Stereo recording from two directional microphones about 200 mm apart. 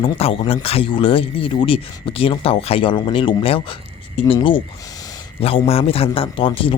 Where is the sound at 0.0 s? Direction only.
30° left (ahead or behind).